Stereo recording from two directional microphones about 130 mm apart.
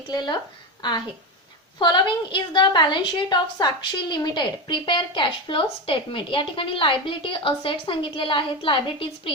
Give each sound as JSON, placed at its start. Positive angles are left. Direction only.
{"t": 0.1, "sound": "a woman's voice", "side_deg": 35}